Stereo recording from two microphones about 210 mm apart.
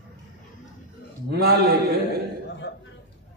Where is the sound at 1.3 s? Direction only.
50° right (ahead or behind).